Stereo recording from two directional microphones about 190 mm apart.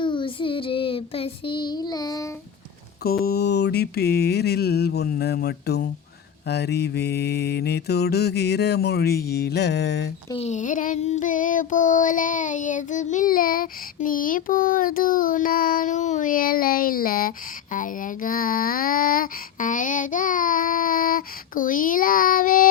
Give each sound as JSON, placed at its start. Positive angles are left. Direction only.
{"t": 0.0, "sound": "child singing", "side_deg": 25}
{"t": 3.0, "sound": "mantra", "side_deg": 55}
{"t": 10.3, "sound": "child singing", "side_deg": 35}